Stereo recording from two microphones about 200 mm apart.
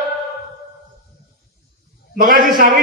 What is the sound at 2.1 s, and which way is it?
Speech, 45° right (ahead or behind).